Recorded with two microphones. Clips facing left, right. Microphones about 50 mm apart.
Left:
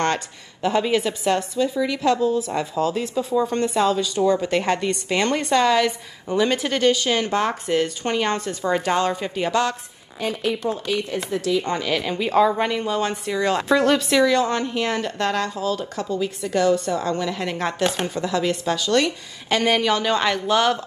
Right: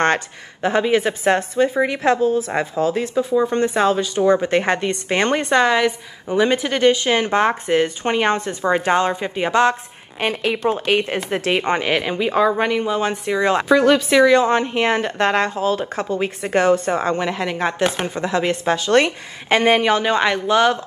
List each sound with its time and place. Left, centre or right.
0.0 s speech: right
10.2 s a woman's voice: right
10.6 s speech: right
11.6 s speech: right
12.2 s speech: centre